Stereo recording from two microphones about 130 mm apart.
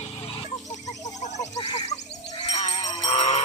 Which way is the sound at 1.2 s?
55° left (ahead or behind).